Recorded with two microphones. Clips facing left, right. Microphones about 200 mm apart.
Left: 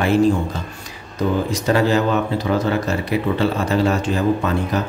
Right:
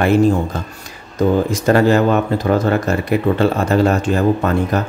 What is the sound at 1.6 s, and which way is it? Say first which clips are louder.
Speech: right 4 dB; 50° right (ahead or behind).